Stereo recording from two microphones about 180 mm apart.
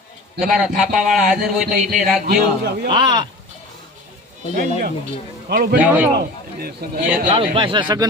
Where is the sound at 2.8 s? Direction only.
25° right (ahead or behind).